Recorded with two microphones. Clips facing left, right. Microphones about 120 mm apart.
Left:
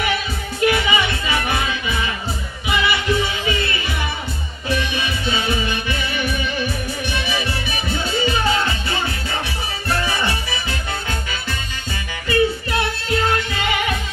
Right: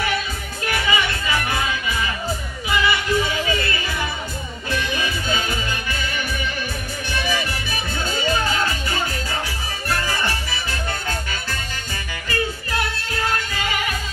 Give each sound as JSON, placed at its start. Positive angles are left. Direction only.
{"t": 0.7, "sound": "music", "side_deg": 20}
{"t": 4.6, "sound": "music", "side_deg": 20}
{"t": 8.3, "sound": "music", "side_deg": 20}
{"t": 12.3, "sound": "music", "side_deg": 20}